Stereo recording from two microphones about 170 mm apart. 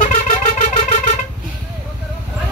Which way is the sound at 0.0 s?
45° left (ahead or behind).